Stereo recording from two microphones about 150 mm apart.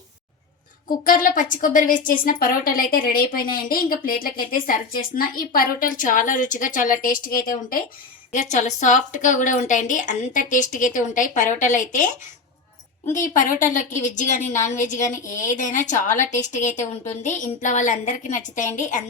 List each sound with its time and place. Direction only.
0.9 s a woman's voice: 70° left (ahead or behind)
8.3 s a woman's voice: 55° left (ahead or behind)
13.1 s a woman's voice: 60° left (ahead or behind)
14.4 s a woman's voice: 20° left (ahead or behind)
14.8 s a woman's voice: 55° left (ahead or behind)